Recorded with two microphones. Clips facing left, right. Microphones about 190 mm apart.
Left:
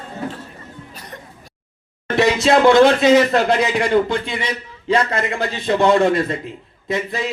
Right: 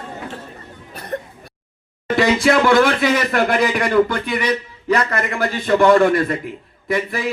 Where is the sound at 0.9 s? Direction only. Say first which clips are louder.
Right 15 dB; 55° right (ahead or behind).